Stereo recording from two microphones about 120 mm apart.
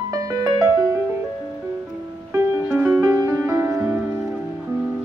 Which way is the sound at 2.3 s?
20° right (ahead or behind).